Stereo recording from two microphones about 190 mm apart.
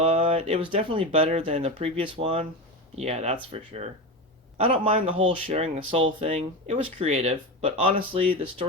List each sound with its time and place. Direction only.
0.0 s speech: 30° right (ahead or behind)